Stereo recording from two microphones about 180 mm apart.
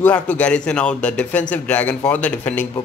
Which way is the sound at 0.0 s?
10° left (ahead or behind).